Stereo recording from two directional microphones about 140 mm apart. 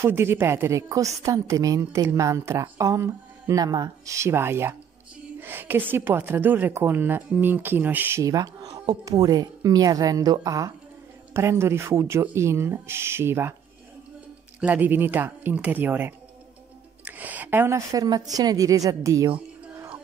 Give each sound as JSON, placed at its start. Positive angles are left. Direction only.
{"t": 0.0, "sound": "a woman's voice", "side_deg": -15}
{"t": 14.6, "sound": "a woman's voice", "side_deg": -10}